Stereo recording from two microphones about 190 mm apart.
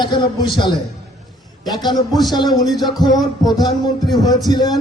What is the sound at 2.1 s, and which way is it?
Music, centre (ahead or behind).